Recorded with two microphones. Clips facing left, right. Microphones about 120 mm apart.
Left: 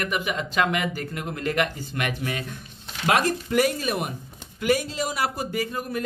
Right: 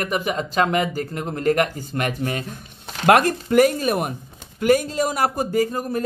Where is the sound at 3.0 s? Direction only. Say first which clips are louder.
Right 6 dB; 55° right (ahead or behind).